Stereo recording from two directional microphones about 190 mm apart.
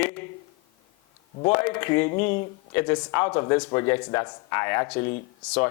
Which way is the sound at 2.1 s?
45° left (ahead or behind).